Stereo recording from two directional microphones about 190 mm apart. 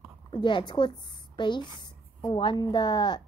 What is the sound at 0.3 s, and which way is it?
A woman's voice, 25° left (ahead or behind).